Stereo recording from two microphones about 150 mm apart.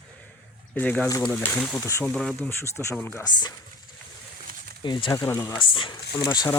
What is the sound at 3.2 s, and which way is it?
Speech, 25° left (ahead or behind).